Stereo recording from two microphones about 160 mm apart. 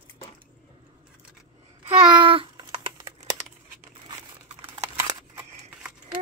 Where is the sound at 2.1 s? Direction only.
30° right (ahead or behind).